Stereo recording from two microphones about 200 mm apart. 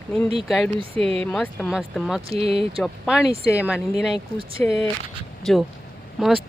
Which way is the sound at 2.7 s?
5° right (ahead or behind).